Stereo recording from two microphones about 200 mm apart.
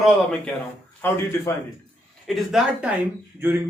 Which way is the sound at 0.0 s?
5° left (ahead or behind).